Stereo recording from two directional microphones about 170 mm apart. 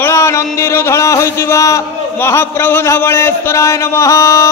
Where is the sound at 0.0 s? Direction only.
15° left (ahead or behind).